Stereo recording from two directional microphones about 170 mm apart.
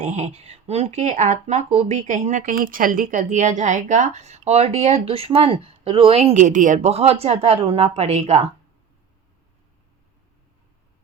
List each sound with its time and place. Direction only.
0.0 s speech: 40° right (ahead or behind)